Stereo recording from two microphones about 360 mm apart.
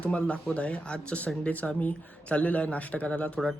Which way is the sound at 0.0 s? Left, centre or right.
Centre.